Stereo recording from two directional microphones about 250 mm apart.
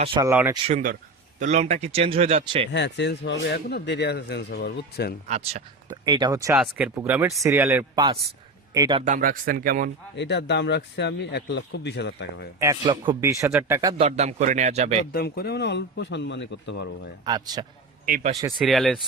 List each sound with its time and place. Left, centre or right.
0.0 s speech: right
0.3 s speech: centre
0.7 s speech: right
2.7 s speech: left
5.3 s speech: right
9.0 s speech: right
10.2 s a man's voice: left
12.5 s speech: centre
14.0 s speech: right
15.1 s a man's voice: left
17.2 s speech: centre
18.0 s speech: right
18.5 s speech: centre